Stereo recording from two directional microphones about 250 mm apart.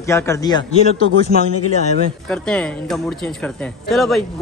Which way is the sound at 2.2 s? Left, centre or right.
Centre.